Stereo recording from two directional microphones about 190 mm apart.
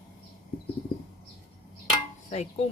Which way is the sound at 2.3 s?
35° left (ahead or behind).